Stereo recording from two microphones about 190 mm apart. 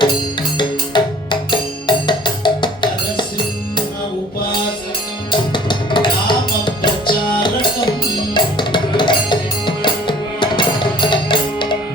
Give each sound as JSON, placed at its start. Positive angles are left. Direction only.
{"t": 0.5, "sound": "music", "side_deg": 25}
{"t": 5.3, "sound": "music", "side_deg": 25}
{"t": 8.3, "sound": "music", "side_deg": 25}